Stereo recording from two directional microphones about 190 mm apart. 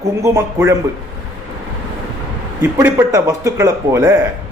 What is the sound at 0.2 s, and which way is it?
Speech, 15° right (ahead or behind).